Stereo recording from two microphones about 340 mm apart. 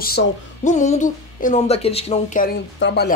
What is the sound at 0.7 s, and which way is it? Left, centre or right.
Speech, left.